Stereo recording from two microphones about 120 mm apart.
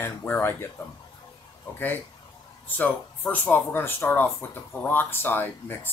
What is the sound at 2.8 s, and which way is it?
Speech, 10° left (ahead or behind).